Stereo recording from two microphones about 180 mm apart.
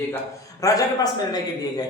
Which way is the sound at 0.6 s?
20° left (ahead or behind).